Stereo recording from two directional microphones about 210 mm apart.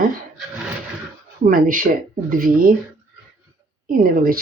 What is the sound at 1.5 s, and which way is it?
Speech, 40° right (ahead or behind).